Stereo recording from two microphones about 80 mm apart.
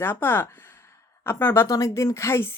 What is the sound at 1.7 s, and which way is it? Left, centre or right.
Speech, left.